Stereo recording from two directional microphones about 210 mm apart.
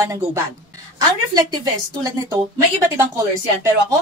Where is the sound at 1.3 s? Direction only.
15° right (ahead or behind).